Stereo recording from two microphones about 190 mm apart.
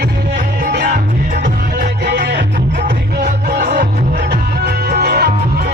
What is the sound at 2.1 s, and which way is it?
Music, 60° right (ahead or behind).